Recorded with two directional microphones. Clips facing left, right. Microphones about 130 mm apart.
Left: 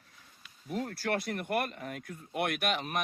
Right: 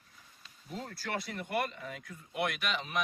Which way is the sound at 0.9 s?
60° left (ahead or behind).